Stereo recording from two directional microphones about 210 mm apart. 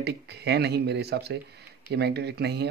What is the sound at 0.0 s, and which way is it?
Speech, 50° right (ahead or behind).